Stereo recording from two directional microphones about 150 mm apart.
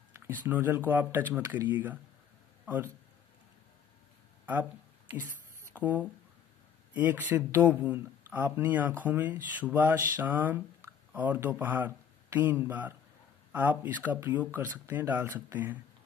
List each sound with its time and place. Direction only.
0.4 s a man's voice: 15° right (ahead or behind)
5.8 s speech: 10° right (ahead or behind)